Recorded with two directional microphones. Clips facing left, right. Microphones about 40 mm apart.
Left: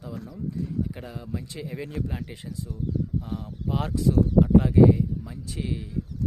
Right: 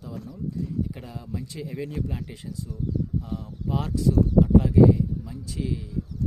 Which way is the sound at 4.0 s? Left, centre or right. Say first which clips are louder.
Even; centre.